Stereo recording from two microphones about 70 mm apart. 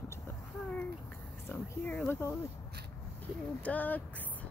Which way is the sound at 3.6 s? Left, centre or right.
Left.